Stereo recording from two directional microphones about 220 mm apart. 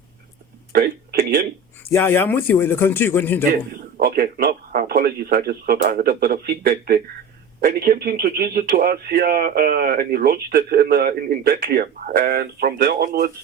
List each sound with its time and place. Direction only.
1.8 s a man's voice: 10° left (ahead or behind)
3.9 s speech: 40° right (ahead or behind)